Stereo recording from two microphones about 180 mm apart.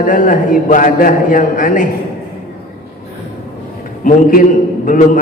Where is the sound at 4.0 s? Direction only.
50° left (ahead or behind).